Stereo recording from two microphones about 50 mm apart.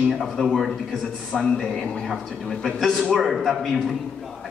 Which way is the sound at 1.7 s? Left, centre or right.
Centre.